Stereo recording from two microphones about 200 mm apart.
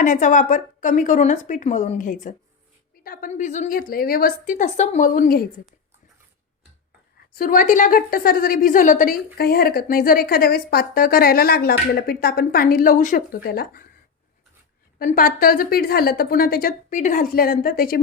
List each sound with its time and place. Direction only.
0.0 s a woman's voice: 40° left (ahead or behind)
7.3 s a woman's voice: 45° left (ahead or behind)
14.9 s a woman's voice: 45° left (ahead or behind)